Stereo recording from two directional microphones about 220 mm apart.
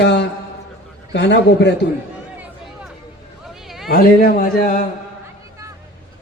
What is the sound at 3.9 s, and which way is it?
Speech, 40° left (ahead or behind).